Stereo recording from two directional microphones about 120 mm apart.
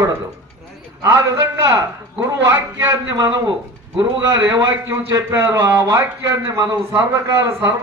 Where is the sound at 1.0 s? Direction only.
30° right (ahead or behind).